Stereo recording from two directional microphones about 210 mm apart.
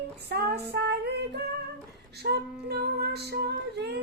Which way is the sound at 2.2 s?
50° right (ahead or behind).